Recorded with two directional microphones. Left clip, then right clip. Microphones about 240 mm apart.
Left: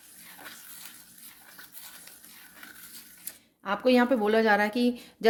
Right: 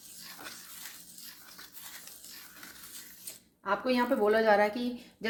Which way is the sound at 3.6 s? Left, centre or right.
Left.